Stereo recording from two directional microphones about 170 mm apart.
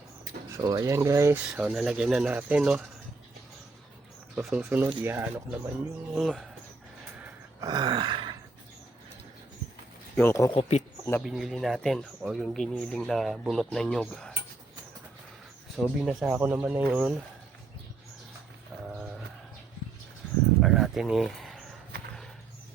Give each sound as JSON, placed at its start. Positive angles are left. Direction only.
{"t": 0.5, "sound": "speech", "side_deg": -20}
{"t": 1.5, "sound": "speech", "side_deg": -5}
{"t": 4.4, "sound": "speech", "side_deg": -5}
{"t": 6.1, "sound": "speech", "side_deg": 0}
{"t": 7.6, "sound": "groan", "side_deg": -25}
{"t": 10.2, "sound": "speech", "side_deg": 15}
{"t": 10.5, "sound": "speech", "side_deg": 40}
{"t": 11.2, "sound": "speech", "side_deg": 0}
{"t": 15.8, "sound": "speech", "side_deg": -5}
{"t": 18.7, "sound": "livestock", "side_deg": 0}
{"t": 20.6, "sound": "a sound", "side_deg": 0}